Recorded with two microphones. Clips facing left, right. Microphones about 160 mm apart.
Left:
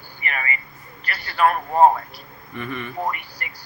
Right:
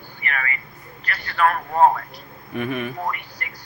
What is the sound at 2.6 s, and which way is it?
Speech, 70° right (ahead or behind).